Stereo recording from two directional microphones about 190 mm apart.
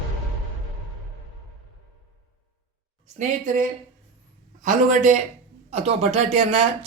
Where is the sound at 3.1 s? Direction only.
40° right (ahead or behind).